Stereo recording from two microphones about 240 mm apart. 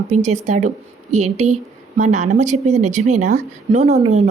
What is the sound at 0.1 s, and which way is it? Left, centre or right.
A woman's voice, right.